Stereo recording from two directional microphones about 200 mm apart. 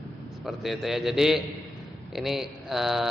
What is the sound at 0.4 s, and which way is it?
A man's voice, centre (ahead or behind).